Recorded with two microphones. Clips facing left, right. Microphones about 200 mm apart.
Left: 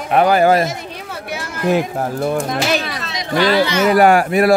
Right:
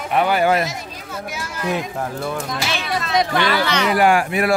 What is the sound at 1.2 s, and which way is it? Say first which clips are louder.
Speech: left 7 dB; 65° left (ahead or behind).